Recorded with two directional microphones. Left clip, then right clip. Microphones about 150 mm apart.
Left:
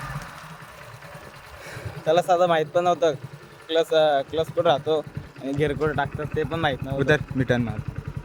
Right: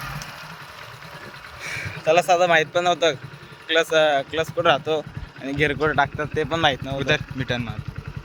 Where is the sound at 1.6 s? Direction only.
5° right (ahead or behind).